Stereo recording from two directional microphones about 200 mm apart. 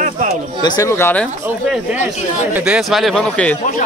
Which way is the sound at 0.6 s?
15° left (ahead or behind).